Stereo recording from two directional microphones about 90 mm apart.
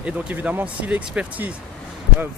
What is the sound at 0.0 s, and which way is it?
Speech, 15° right (ahead or behind).